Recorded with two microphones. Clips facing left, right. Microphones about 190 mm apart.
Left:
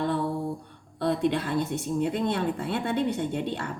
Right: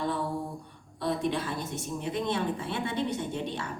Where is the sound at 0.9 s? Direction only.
65° left (ahead or behind).